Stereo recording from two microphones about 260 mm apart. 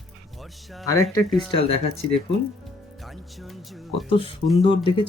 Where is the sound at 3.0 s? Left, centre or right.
Centre.